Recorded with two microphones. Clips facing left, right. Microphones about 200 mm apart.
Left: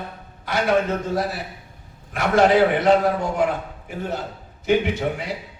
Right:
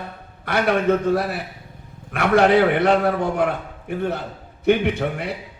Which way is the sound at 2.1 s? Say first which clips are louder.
Right 1 dB; 60° right (ahead or behind).